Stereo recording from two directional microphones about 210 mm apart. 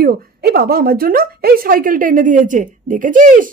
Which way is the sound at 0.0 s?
45° right (ahead or behind).